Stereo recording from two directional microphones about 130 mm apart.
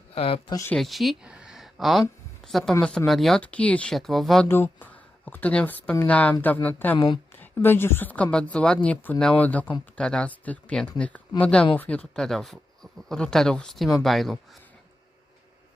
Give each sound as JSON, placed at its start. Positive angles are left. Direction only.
{"t": 0.1, "sound": "speech", "side_deg": 45}
{"t": 0.7, "sound": "speech", "side_deg": 0}
{"t": 4.4, "sound": "speech", "side_deg": 15}
{"t": 6.9, "sound": "speech", "side_deg": 40}
{"t": 7.6, "sound": "speech", "side_deg": 15}